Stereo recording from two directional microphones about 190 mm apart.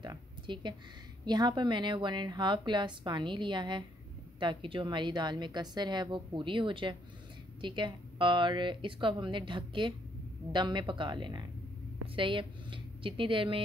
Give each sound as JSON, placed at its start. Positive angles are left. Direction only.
{"t": 0.0, "sound": "a woman's voice", "side_deg": -25}